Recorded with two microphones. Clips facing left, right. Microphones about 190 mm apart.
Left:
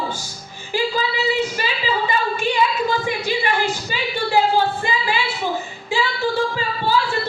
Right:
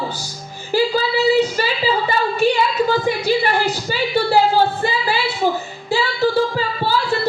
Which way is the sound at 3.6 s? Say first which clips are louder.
Right 3 dB; 40° right (ahead or behind).